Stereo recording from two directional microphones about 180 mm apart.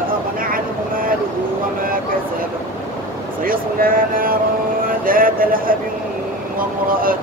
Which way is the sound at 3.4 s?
50° right (ahead or behind).